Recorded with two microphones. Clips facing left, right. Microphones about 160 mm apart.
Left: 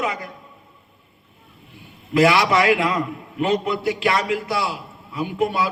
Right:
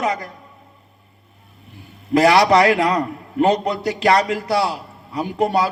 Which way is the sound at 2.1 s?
40° right (ahead or behind).